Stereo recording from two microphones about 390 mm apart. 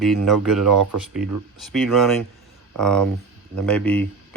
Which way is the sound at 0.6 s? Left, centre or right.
Right.